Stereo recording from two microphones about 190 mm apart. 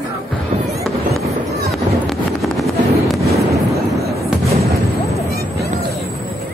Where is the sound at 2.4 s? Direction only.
Centre (ahead or behind).